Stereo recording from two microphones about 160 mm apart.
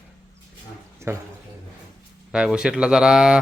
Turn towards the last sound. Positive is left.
turn(degrees=-5)  # may be behind; listen again after turning